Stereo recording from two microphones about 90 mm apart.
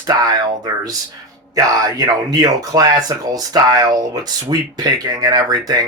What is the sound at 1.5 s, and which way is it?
Speech, 40° right (ahead or behind).